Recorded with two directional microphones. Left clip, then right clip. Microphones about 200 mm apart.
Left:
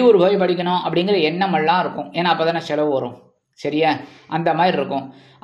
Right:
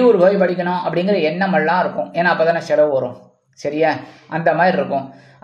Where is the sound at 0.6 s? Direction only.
25° left (ahead or behind).